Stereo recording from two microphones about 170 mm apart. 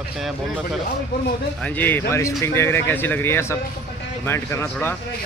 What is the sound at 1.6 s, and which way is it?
Speech, 10° left (ahead or behind).